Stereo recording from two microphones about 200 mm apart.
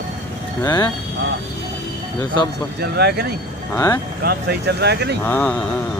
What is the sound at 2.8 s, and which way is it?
Speech, 50° right (ahead or behind).